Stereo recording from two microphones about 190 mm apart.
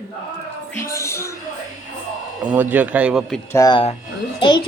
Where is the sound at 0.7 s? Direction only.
15° left (ahead or behind).